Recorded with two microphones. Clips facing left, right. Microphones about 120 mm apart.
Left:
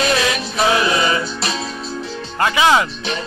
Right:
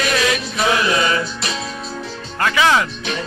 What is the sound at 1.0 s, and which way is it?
Music, 25° left (ahead or behind).